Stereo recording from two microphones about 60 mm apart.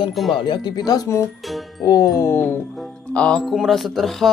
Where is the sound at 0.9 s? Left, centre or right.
Left.